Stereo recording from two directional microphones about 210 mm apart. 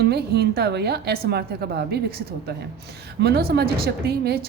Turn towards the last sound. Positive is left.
turn(degrees=-50)  # may be behind; listen again after turning